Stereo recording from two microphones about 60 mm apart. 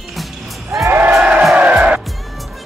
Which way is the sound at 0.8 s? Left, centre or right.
Right.